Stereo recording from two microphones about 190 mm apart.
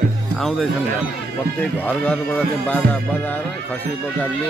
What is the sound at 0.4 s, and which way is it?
Speech, centre (ahead or behind).